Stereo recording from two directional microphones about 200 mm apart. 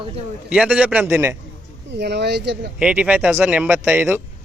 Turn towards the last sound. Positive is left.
turn(degrees=-10)  # may be behind; listen again after turning